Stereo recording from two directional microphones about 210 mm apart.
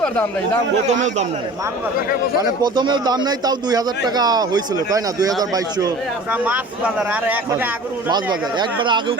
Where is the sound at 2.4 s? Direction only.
20° right (ahead or behind).